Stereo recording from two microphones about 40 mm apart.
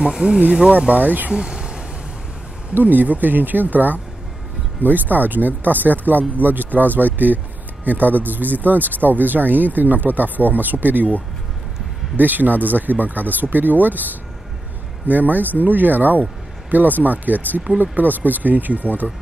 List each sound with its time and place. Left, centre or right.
0.2 s speech: right
1.3 s a sound: right
2.7 s speech: right
12.2 s speech: right